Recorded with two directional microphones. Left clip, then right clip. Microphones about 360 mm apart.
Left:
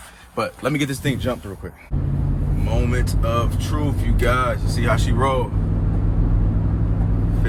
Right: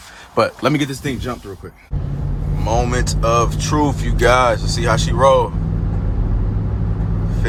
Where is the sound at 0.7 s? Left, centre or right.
Centre.